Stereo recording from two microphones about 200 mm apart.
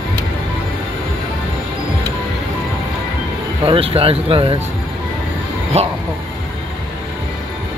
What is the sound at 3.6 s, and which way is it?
Speech, 30° right (ahead or behind).